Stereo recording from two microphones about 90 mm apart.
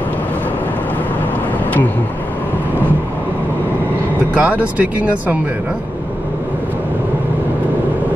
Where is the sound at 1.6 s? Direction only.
20° left (ahead or behind).